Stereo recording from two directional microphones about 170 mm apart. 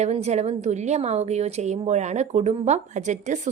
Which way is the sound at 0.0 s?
40° right (ahead or behind).